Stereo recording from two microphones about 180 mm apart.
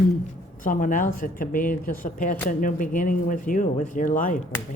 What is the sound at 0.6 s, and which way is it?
Speech, 50° left (ahead or behind).